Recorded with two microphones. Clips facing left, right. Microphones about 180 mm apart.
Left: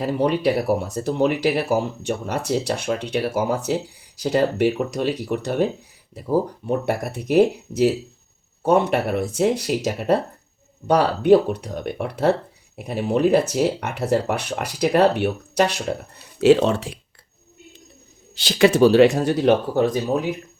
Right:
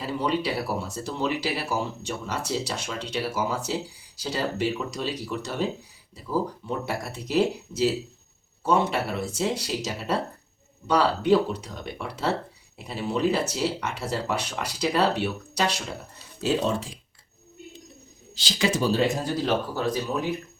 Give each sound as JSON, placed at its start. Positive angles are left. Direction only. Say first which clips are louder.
{"t": 0.0, "sound": "speech", "louder": "left 7 dB", "side_deg": 55}
{"t": 16.4, "sound": "speech", "louder": "left 10 dB", "side_deg": 75}
{"t": 18.3, "sound": "speech", "louder": "left 10 dB", "side_deg": 60}